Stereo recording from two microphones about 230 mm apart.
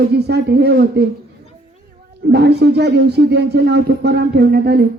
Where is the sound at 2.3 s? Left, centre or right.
Right.